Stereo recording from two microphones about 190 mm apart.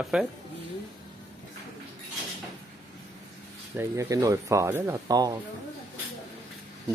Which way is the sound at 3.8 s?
15° right (ahead or behind).